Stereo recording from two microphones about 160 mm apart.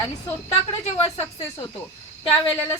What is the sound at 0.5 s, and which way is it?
Speech, 35° left (ahead or behind).